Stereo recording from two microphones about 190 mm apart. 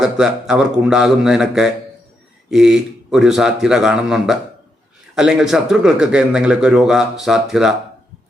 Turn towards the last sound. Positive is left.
turn(degrees=0)  # may be behind; listen again after turning